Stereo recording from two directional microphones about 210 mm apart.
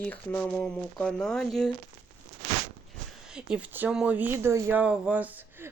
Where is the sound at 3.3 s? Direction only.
5° right (ahead or behind).